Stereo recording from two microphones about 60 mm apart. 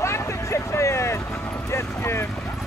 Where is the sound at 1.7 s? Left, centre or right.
Left.